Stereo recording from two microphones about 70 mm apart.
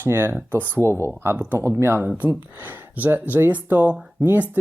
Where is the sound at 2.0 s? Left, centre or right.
Right.